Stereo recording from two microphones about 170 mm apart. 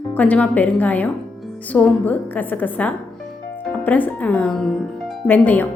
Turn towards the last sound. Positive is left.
turn(degrees=10)  # may be behind; listen again after turning